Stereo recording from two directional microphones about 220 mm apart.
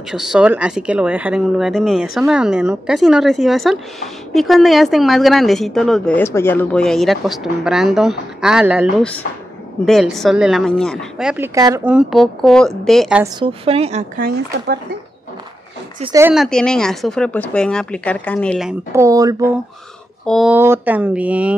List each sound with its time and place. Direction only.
0.1 s speech: centre (ahead or behind)
9.8 s speech: centre (ahead or behind)
13.2 s a woman's voice: 25° right (ahead or behind)
14.2 s speech: 45° right (ahead or behind)
16.2 s speech: 10° right (ahead or behind)
16.4 s speech: 5° left (ahead or behind)
18.9 s speech: 15° right (ahead or behind)
20.2 s speech: centre (ahead or behind)